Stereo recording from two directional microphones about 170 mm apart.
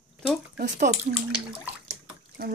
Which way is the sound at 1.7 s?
10° right (ahead or behind).